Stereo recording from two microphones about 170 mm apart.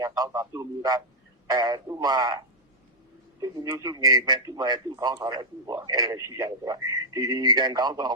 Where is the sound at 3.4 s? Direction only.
20° right (ahead or behind).